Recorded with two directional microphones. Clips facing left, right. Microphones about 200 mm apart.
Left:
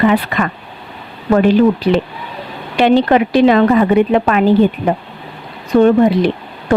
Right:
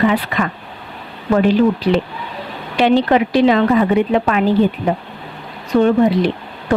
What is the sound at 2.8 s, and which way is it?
Speech, 55° left (ahead or behind).